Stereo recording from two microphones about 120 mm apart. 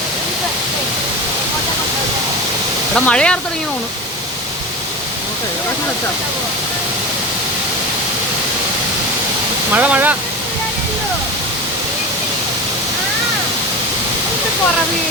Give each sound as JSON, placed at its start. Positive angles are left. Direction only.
{"t": 2.9, "sound": "speech", "side_deg": 10}
{"t": 9.7, "sound": "speech", "side_deg": -15}